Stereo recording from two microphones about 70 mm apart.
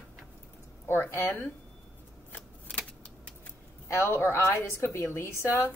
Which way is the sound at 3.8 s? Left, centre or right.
Left.